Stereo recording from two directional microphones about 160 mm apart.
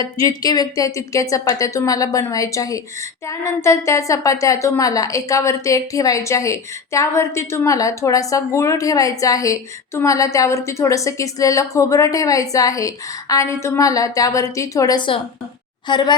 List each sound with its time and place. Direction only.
0.0 s a woman's voice: 25° left (ahead or behind)